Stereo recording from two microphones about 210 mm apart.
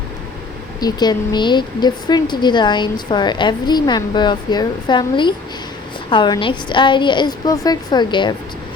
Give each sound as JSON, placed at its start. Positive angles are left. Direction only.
{"t": 0.8, "sound": "a woman's voice", "side_deg": 20}